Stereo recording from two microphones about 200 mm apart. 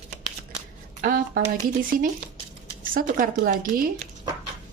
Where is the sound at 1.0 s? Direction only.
45° right (ahead or behind).